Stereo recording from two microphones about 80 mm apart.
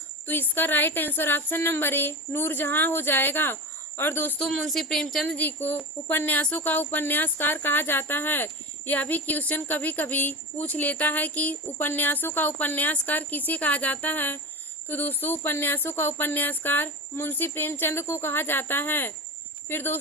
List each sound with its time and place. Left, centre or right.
0.3 s speech: left
4.4 s speech: centre
5.4 s speech: left